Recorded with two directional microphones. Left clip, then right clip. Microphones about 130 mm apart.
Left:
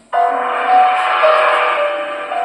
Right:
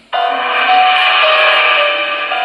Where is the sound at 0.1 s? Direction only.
35° left (ahead or behind).